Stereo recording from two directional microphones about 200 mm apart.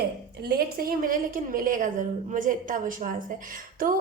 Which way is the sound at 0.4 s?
45° right (ahead or behind).